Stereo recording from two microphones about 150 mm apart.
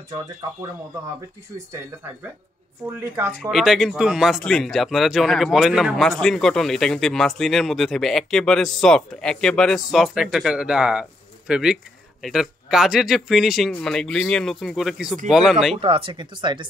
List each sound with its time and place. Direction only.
3.0 s speech: 15° right (ahead or behind)
3.3 s speech: centre (ahead or behind)
15.7 s speech: 40° right (ahead or behind)